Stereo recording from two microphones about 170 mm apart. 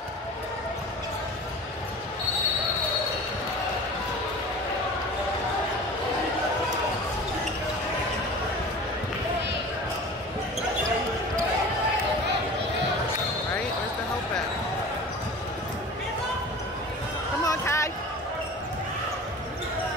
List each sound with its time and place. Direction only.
17.5 s basketball bounce: 20° left (ahead or behind)